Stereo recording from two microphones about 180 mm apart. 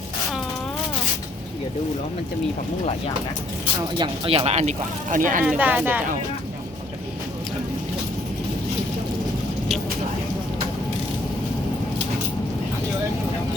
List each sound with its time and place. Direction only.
3.9 s speech: 25° right (ahead or behind); by 5.4 s 45° right (ahead or behind)
5.4 s speech: 10° right (ahead or behind)